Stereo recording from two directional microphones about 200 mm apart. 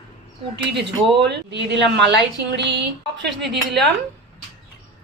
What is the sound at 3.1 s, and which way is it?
Speech, 60° right (ahead or behind).